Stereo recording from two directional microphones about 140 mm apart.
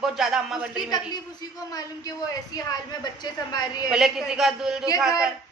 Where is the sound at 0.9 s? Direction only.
30° left (ahead or behind).